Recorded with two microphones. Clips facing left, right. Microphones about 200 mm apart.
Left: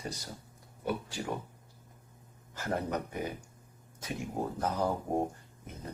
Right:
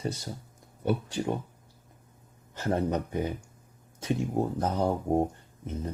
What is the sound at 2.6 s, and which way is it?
Speech, 25° right (ahead or behind).